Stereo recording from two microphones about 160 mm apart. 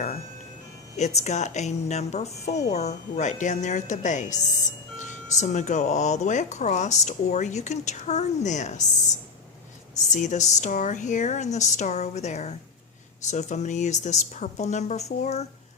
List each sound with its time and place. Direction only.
0.9 s speech: 45° left (ahead or behind)
5.4 s speech: 45° left (ahead or behind)
10.0 s speech: 50° left (ahead or behind)